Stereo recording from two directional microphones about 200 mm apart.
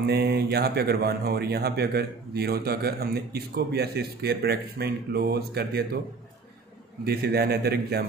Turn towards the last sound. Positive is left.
turn(degrees=-50)  # may be behind; listen again after turning